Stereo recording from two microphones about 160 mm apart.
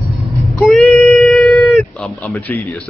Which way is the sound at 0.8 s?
Centre (ahead or behind).